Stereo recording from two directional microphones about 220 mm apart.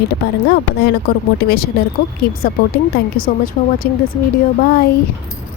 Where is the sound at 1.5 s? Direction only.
45° left (ahead or behind).